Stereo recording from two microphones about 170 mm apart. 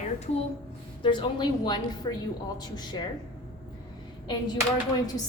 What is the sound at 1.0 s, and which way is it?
A woman's voice, 30° left (ahead or behind).